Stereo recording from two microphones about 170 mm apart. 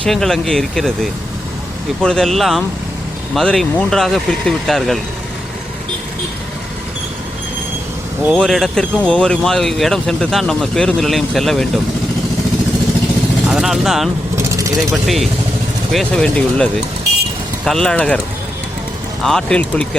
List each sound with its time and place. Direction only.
0.0 s speech: centre (ahead or behind)
2.0 s speech: 5° left (ahead or behind)
8.3 s speech: centre (ahead or behind)
13.5 s speech: centre (ahead or behind)
14.3 s vehicle: 20° right (ahead or behind)
15.0 s speech: centre (ahead or behind)
17.7 s speech: 5° left (ahead or behind)
19.2 s speech: 5° left (ahead or behind)